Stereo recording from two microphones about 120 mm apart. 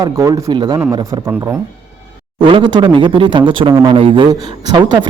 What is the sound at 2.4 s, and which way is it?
Speech, 45° right (ahead or behind).